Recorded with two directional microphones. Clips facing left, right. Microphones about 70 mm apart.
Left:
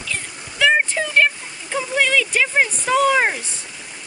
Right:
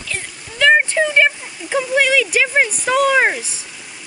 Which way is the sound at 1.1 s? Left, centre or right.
Centre.